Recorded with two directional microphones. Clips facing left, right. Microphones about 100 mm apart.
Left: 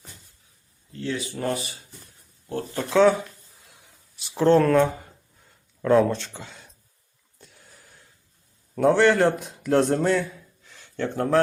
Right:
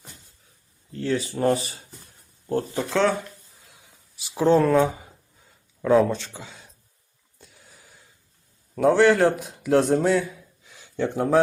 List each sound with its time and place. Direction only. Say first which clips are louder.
0.9 s speech: right 4 dB; 35° right (ahead or behind)
2.9 s a sound: left 5 dB; 5° left (ahead or behind)
8.7 s a man's voice: right 1 dB; centre (ahead or behind)